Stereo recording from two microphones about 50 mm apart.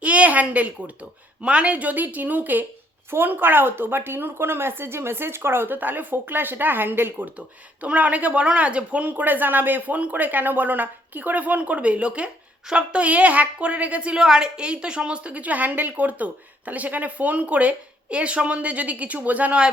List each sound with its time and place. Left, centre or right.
0.0 s a sound: right
1.4 s a woman's voice: right
7.2 s a woman's voice: right